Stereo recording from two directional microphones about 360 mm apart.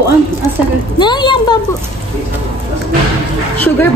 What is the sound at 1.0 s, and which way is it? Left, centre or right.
Speech, centre.